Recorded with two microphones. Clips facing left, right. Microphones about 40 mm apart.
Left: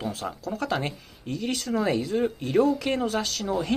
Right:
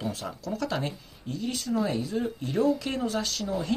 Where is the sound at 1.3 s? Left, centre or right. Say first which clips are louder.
Left 2 dB; left.